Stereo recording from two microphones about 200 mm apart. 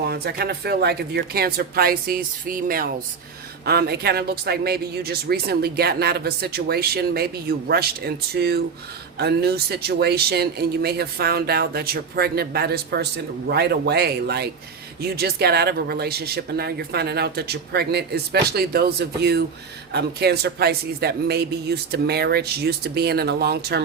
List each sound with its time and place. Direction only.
0.0 s speech: 55° right (ahead or behind)